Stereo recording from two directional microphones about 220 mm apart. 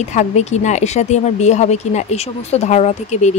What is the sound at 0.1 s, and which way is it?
Speech, 30° left (ahead or behind).